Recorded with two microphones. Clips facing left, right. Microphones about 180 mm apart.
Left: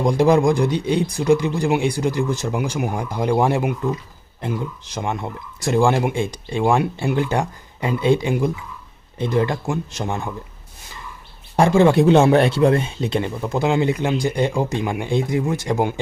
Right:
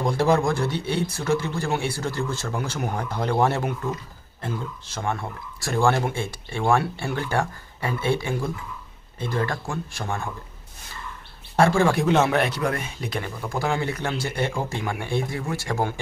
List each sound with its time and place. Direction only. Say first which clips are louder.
0.0 s speech: left 5 dB; 15° left (ahead or behind)
11.5 s speech: left 5 dB; 15° left (ahead or behind)